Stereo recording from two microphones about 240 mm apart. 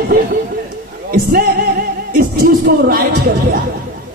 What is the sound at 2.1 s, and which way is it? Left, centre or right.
Speech, right.